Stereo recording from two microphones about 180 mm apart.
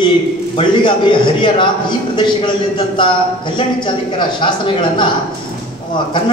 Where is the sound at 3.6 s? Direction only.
25° left (ahead or behind).